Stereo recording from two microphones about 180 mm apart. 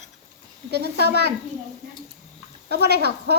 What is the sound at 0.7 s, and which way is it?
Speech, 65° right (ahead or behind).